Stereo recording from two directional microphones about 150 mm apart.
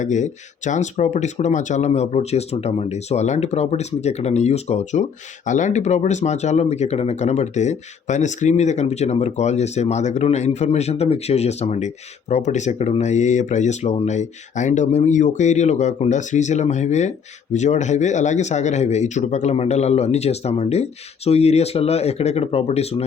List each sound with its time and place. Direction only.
0.0 s speech: 55° left (ahead or behind)